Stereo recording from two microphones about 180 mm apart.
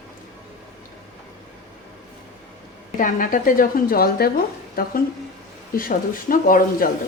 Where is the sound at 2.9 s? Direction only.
50° left (ahead or behind).